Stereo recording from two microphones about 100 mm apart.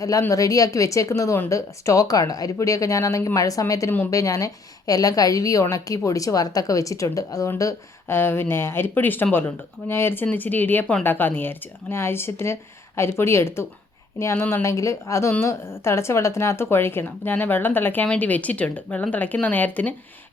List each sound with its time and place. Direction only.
0.0 s a woman's voice: 35° left (ahead or behind); by 19.9 s 15° left (ahead or behind)